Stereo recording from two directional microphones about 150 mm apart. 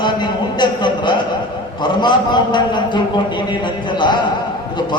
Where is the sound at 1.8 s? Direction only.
30° left (ahead or behind).